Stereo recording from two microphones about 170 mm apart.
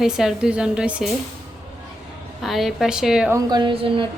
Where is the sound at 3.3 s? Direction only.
25° right (ahead or behind).